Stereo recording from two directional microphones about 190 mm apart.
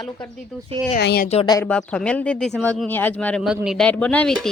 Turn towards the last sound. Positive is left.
turn(degrees=5)  # may be behind; listen again after turning